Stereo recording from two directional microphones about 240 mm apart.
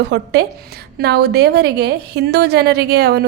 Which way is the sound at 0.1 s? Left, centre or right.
Right.